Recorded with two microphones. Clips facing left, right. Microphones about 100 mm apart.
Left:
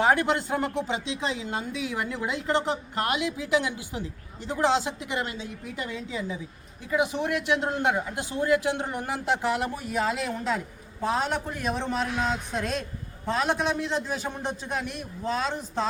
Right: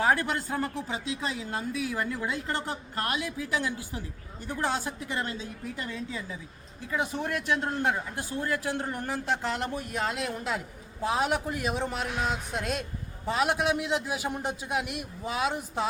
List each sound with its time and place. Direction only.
0.0 s a woman's voice: 25° left (ahead or behind); by 12.0 s 5° right (ahead or behind)
13.2 s a man's voice: 5° right (ahead or behind)